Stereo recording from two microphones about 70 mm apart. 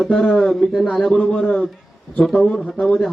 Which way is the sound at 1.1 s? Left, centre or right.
Centre.